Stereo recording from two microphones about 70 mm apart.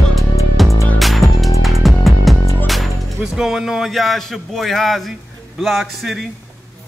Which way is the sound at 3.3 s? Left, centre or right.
Centre.